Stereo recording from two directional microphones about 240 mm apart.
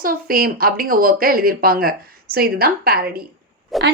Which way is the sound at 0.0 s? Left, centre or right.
Right.